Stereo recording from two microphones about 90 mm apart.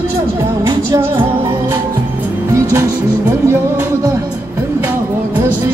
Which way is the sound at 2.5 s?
35° right (ahead or behind).